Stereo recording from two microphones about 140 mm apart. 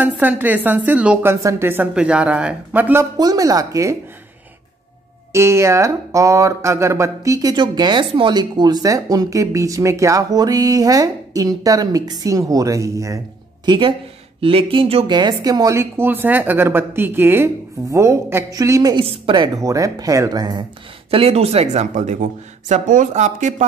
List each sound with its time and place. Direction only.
0.0 s speech: 10° right (ahead or behind)
1.2 s speech: 20° right (ahead or behind)
3.2 s speech: 25° right (ahead or behind)
5.3 s speech: 20° right (ahead or behind)
13.7 s speech: 35° right (ahead or behind)
19.6 s speech: 25° right (ahead or behind)
21.1 s speech: 45° right (ahead or behind)